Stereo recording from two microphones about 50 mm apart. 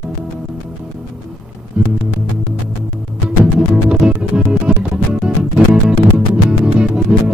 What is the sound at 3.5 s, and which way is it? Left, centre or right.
Music, centre.